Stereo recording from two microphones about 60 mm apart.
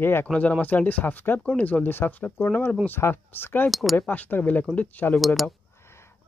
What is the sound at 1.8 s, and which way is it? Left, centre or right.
Speech, left.